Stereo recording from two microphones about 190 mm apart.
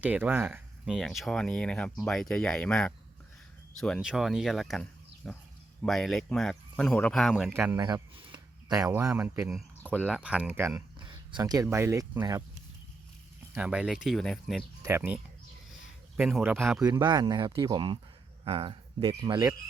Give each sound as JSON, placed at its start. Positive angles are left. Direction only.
{"t": 0.0, "sound": "speech", "side_deg": -10}
{"t": 0.9, "sound": "speech", "side_deg": 0}
{"t": 7.7, "sound": "speech", "side_deg": -20}
{"t": 9.5, "sound": "speech", "side_deg": 0}
{"t": 11.0, "sound": "speech", "side_deg": -25}
{"t": 13.5, "sound": "speech", "side_deg": -5}
{"t": 14.8, "sound": "speech", "side_deg": -15}
{"t": 16.8, "sound": "speech", "side_deg": -20}